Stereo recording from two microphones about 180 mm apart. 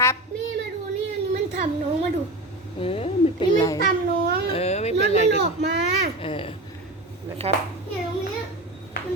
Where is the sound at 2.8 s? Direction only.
30° left (ahead or behind).